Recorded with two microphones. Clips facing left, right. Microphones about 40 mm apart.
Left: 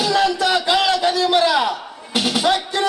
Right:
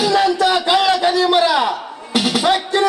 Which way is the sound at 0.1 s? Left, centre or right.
Centre.